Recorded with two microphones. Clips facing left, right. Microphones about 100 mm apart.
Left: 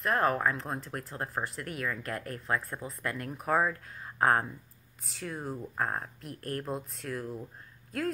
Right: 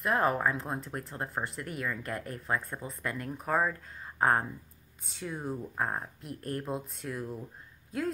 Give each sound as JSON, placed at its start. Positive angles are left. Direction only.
{"t": 0.0, "sound": "speech", "side_deg": -10}